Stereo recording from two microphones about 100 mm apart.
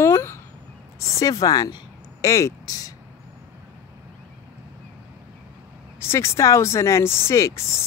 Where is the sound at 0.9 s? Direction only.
35° left (ahead or behind).